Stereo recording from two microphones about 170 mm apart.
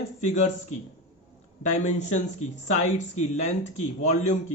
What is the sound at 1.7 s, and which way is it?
Speech, 45° left (ahead or behind).